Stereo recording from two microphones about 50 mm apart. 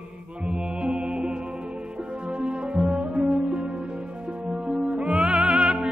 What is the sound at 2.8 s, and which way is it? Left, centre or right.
Music, centre.